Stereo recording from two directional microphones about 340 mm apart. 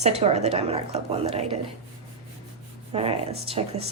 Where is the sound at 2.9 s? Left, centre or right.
Centre.